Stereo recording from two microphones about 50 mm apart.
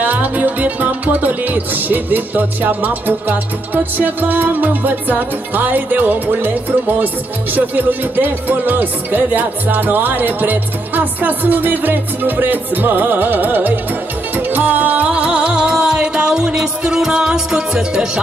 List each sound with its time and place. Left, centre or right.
0.0 s music: right; by 18.2 s centre